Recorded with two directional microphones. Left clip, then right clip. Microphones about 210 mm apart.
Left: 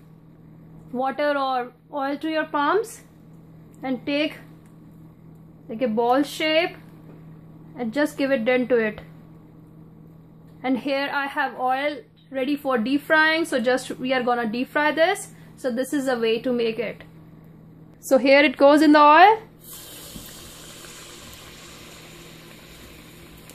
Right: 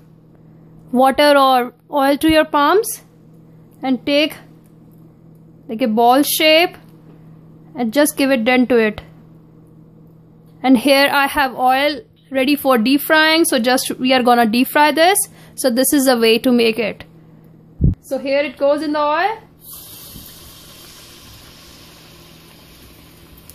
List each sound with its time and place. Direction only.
0.9 s a woman's voice: 45° right (ahead or behind)
5.7 s a woman's voice: 45° right (ahead or behind)
7.7 s a woman's voice: 45° right (ahead or behind)
10.6 s a woman's voice: 45° right (ahead or behind)
18.0 s a woman's voice: 50° left (ahead or behind)